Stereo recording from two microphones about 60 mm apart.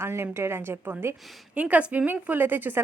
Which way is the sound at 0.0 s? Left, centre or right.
Right.